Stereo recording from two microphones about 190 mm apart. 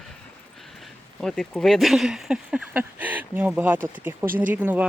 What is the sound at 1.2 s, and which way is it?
Speech, centre (ahead or behind).